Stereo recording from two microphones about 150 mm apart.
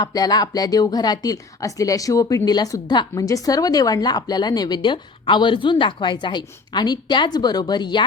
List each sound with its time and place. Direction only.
0.0 s speech: 25° left (ahead or behind)